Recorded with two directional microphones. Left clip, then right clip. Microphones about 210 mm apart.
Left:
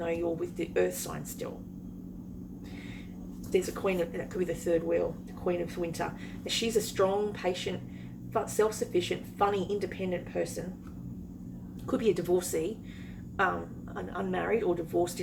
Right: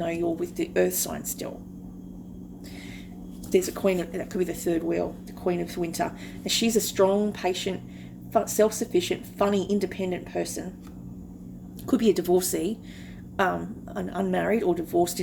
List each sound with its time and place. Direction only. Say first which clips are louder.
0.0 s a woman's voice: right 4 dB; 50° right (ahead or behind)
3.5 s a woman's voice: right 6 dB; 50° right (ahead or behind)
11.9 s a woman's voice: right 5 dB; 50° right (ahead or behind)
13.9 s a woman's voice: right 6 dB; 50° right (ahead or behind)